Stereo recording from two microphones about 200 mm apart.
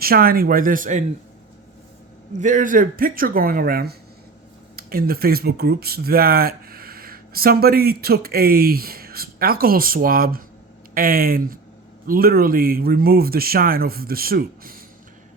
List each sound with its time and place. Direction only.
0.0 s speech: 50° right (ahead or behind)
2.4 s speech: 40° right (ahead or behind)